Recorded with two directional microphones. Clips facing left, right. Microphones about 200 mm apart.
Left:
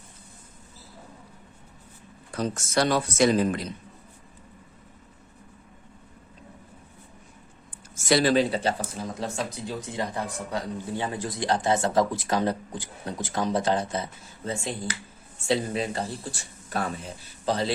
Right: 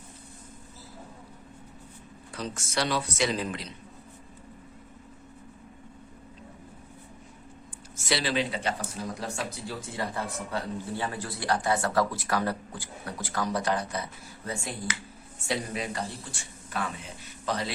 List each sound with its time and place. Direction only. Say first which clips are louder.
2.3 s speech: left 6 dB; 45° left (ahead or behind)
7.9 s a man's voice: left 7 dB; 45° left (ahead or behind)
9.1 s a man's voice: left 3 dB; 20° left (ahead or behind)